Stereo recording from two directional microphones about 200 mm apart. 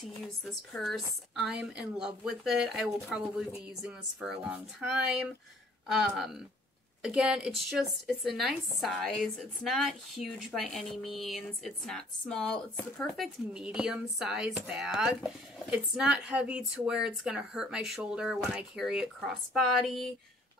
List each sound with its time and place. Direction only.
0.2 s a woman's voice: centre (ahead or behind)